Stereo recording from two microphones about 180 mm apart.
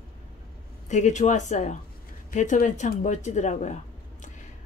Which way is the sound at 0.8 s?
40° left (ahead or behind).